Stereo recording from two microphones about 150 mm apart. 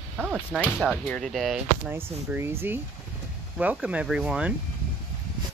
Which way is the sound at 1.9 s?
15° right (ahead or behind).